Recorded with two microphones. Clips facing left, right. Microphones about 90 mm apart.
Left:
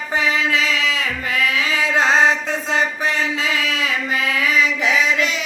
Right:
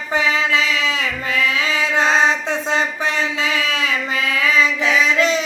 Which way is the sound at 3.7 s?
30° right (ahead or behind).